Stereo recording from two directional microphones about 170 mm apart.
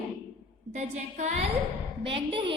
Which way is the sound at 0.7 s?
45° right (ahead or behind).